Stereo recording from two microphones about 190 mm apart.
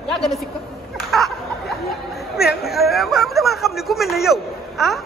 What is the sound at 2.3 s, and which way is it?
Speech, 55° left (ahead or behind).